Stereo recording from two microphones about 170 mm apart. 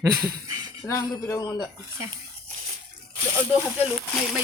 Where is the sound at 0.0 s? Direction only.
20° right (ahead or behind).